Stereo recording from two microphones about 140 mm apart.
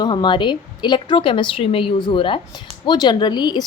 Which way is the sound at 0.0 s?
30° left (ahead or behind).